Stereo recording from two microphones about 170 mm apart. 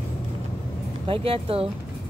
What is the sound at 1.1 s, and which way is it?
Speech, 35° right (ahead or behind).